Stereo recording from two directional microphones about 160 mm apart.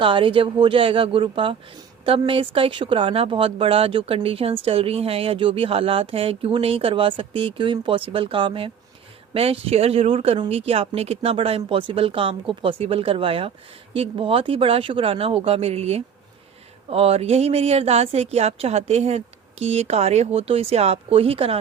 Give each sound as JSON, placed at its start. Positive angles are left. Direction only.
{"t": 0.0, "sound": "speech", "side_deg": -30}